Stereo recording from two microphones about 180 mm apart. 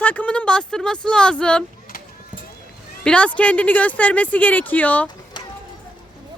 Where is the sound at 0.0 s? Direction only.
10° left (ahead or behind).